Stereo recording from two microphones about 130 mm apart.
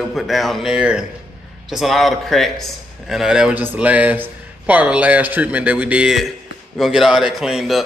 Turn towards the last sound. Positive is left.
turn(degrees=0)  # may be behind; listen again after turning